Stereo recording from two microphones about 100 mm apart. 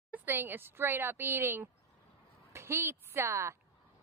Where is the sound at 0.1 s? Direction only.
20° right (ahead or behind).